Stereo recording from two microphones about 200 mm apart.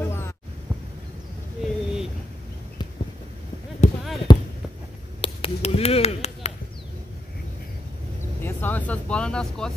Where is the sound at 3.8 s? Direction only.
35° left (ahead or behind).